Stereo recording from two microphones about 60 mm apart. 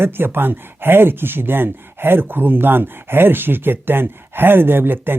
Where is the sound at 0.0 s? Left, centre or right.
Right.